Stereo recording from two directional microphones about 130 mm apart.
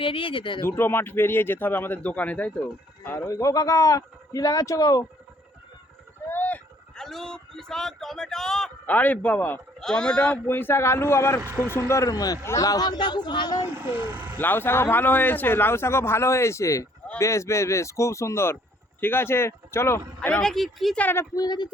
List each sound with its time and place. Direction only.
0.0 s speech: 40° left (ahead or behind)
0.6 s a man's voice: 15° left (ahead or behind)
6.2 s a man's voice: 15° left (ahead or behind); by 13.7 s 30° left (ahead or behind)
13.9 s speech: 15° right (ahead or behind)
14.3 s a man's voice: 15° left (ahead or behind)
21.0 s speech: 15° left (ahead or behind)
21.3 s speech: 30° left (ahead or behind)